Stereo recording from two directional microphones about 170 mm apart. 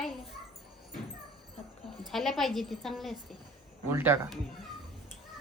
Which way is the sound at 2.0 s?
Centre (ahead or behind).